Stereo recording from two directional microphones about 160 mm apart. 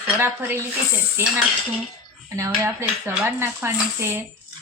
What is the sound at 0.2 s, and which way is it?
Speech, 15° right (ahead or behind).